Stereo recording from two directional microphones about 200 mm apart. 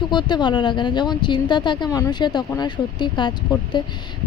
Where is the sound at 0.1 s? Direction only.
20° left (ahead or behind).